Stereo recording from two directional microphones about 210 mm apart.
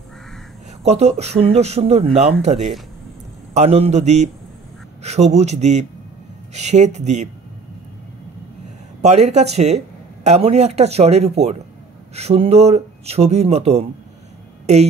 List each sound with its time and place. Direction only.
0.8 s speech: 30° right (ahead or behind)
9.0 s speech: 30° right (ahead or behind)